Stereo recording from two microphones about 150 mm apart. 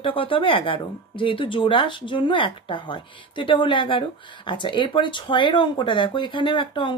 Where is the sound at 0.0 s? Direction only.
35° left (ahead or behind).